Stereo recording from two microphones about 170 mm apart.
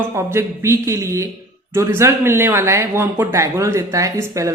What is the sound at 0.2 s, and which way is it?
Speech, 15° right (ahead or behind).